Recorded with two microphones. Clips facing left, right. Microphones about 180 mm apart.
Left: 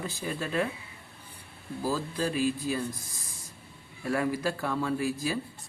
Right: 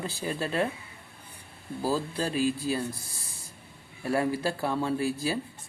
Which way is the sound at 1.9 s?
30° right (ahead or behind).